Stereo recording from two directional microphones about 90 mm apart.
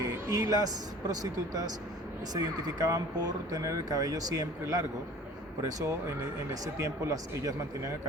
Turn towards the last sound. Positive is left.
turn(degrees=-35)  # may be behind; listen again after turning